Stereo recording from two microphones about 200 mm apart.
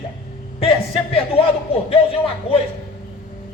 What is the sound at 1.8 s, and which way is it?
Speech, 30° left (ahead or behind).